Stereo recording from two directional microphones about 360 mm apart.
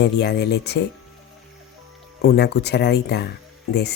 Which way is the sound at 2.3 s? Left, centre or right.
Left.